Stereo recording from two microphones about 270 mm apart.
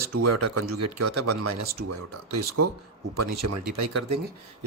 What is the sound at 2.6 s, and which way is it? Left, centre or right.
Speech, right.